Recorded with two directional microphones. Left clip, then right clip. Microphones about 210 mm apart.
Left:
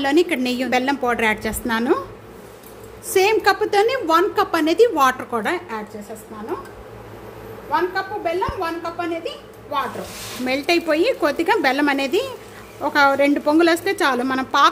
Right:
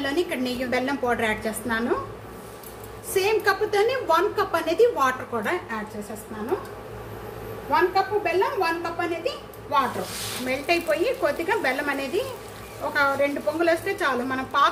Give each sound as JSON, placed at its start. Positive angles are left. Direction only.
{"t": 0.0, "sound": "a woman's voice", "side_deg": 45}
{"t": 3.2, "sound": "a woman's voice", "side_deg": 45}
{"t": 7.7, "sound": "a woman's voice", "side_deg": 20}
{"t": 10.4, "sound": "a woman's voice", "side_deg": 55}